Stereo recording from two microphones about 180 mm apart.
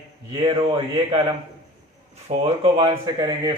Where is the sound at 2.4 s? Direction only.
35° right (ahead or behind).